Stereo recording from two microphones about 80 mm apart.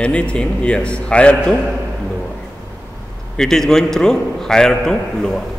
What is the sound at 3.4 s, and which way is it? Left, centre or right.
A man's voice, centre.